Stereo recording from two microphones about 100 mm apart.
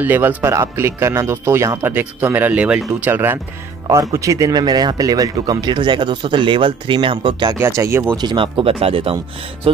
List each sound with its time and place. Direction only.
0.0 s speech: 20° right (ahead or behind)
3.8 s speech: 35° right (ahead or behind); by 7.5 s 50° right (ahead or behind)
7.5 s speech: 30° right (ahead or behind)
8.2 s speech: 50° right (ahead or behind)